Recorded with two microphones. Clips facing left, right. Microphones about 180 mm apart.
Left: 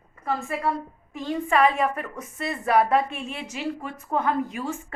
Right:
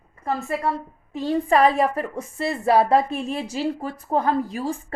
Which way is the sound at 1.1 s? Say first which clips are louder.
Right 4 dB; 35° right (ahead or behind).